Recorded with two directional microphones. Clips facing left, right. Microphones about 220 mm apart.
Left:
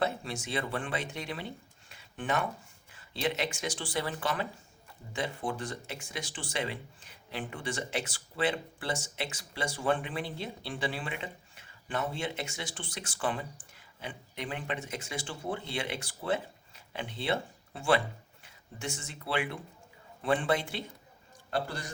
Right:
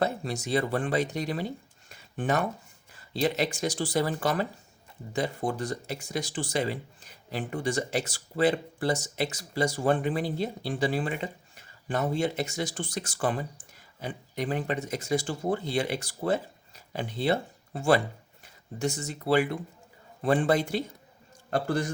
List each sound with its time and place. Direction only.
0.0 s a man's voice: 40° right (ahead or behind)